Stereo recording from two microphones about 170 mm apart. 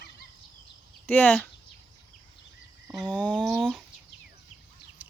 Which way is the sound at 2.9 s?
Centre (ahead or behind).